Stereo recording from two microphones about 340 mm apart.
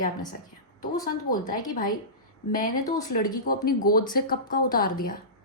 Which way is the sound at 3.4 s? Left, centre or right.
Left.